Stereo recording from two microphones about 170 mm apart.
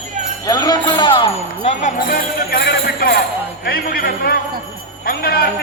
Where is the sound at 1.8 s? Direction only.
55° left (ahead or behind).